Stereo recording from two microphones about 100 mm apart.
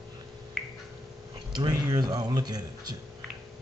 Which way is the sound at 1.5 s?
45° right (ahead or behind).